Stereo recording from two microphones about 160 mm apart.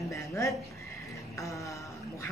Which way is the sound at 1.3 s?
20° left (ahead or behind).